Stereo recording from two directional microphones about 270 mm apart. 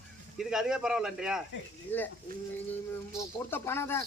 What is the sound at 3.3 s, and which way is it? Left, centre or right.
Speech, centre.